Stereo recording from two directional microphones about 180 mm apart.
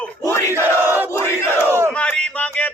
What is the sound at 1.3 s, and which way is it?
Speech, 15° left (ahead or behind).